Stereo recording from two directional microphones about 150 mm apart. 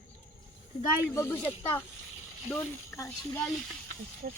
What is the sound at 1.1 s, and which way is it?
Speech, 15° left (ahead or behind).